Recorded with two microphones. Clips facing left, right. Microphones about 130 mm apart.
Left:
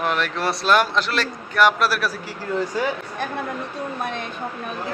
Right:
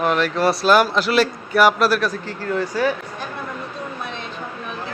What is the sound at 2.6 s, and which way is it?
Speech, 20° left (ahead or behind).